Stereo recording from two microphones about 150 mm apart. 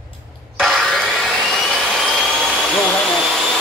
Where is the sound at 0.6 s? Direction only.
Centre (ahead or behind).